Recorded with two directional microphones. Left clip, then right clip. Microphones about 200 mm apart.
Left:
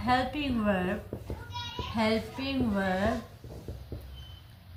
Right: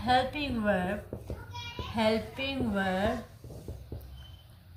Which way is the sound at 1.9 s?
35° right (ahead or behind).